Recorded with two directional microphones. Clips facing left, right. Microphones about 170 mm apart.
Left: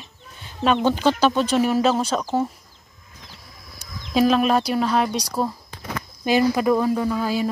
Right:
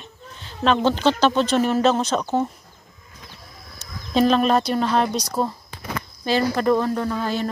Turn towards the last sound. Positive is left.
turn(degrees=5)  # may be behind; listen again after turning